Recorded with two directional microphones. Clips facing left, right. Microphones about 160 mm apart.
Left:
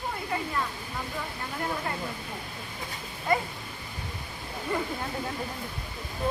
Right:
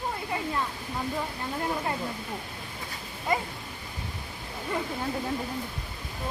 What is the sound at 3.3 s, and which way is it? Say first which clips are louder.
Dog: left 2 dB; 20° right (ahead or behind).